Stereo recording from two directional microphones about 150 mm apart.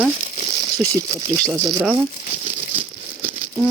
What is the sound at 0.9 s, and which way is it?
Speech, 20° right (ahead or behind).